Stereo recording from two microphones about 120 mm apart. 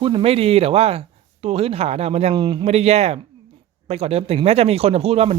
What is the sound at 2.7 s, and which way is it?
Speech, 60° right (ahead or behind).